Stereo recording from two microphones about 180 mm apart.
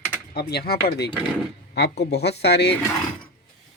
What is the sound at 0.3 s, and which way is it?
Speech, 60° left (ahead or behind).